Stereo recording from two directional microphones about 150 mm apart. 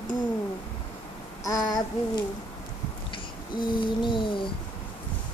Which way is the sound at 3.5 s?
30° left (ahead or behind).